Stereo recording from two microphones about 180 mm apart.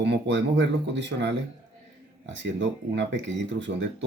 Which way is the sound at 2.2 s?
90° right.